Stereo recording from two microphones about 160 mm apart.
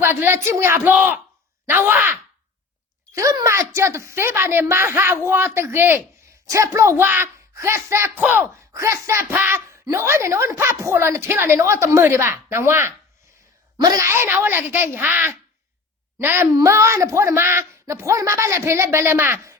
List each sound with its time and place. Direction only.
0.0 s a man's voice: 15° right (ahead or behind)